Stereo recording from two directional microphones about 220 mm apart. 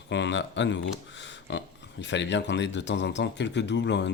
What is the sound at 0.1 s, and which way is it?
Speech, 55° left (ahead or behind).